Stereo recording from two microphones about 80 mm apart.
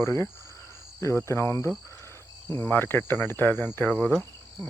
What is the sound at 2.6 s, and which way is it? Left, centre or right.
Cricket, left.